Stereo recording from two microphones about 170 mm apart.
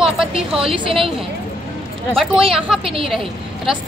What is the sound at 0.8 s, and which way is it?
Speech, 30° right (ahead or behind).